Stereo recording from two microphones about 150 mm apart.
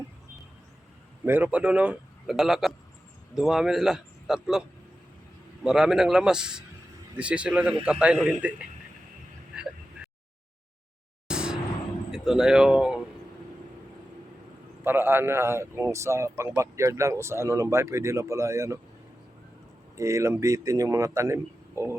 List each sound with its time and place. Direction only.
1.2 s a man's voice: 10° right (ahead or behind)
5.6 s a man's voice: 5° right (ahead or behind)
11.3 s vehicle: 5° right (ahead or behind)
12.1 s speech: 5° right (ahead or behind)
14.8 s a man's voice: 15° right (ahead or behind)
20.0 s a man's voice: 20° right (ahead or behind)